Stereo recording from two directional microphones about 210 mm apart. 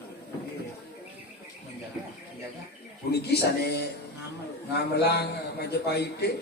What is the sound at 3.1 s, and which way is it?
A man's voice, 50° left (ahead or behind).